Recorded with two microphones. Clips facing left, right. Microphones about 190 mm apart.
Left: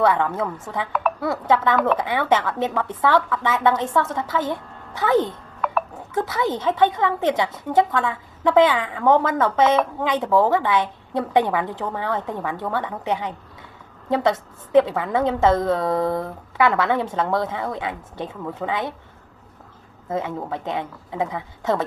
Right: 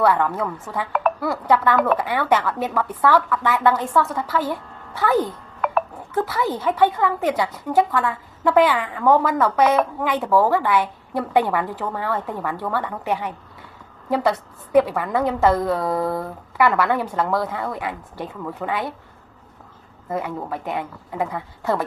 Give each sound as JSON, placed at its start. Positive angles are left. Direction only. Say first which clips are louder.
{"t": 0.0, "sound": "a woman's voice", "louder": "even", "side_deg": 20}
{"t": 20.1, "sound": "a woman's voice", "louder": "even", "side_deg": 20}